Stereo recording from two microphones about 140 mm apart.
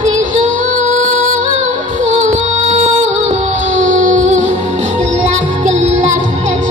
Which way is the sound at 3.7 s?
60° right (ahead or behind).